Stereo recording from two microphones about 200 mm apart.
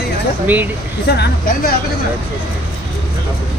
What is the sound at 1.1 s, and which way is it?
Speech, 55° left (ahead or behind).